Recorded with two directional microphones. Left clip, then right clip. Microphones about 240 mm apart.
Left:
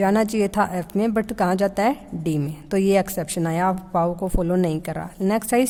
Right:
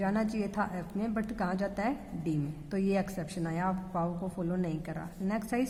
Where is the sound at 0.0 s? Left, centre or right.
Left.